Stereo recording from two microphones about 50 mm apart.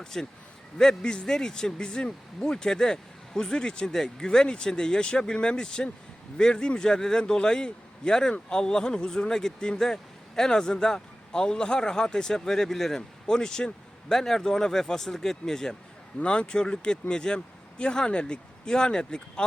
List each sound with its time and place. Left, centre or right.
0.0 s a man's voice: centre